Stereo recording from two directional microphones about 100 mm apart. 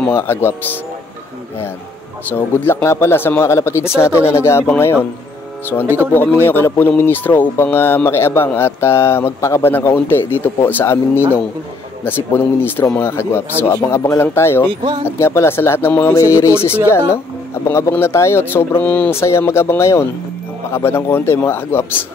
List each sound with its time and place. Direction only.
0.1 s speech: 25° left (ahead or behind)
2.2 s speech: 20° left (ahead or behind)
6.4 s speech: 20° left (ahead or behind)
17.6 s speech: 25° left (ahead or behind)
19.1 s speech: 25° left (ahead or behind)